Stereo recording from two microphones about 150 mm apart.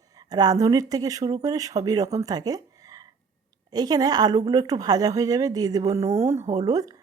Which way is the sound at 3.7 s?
25° right (ahead or behind).